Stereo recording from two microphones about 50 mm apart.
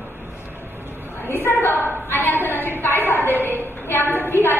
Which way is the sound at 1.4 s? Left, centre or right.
Left.